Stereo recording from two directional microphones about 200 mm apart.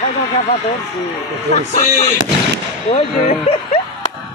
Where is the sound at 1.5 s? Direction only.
35° left (ahead or behind).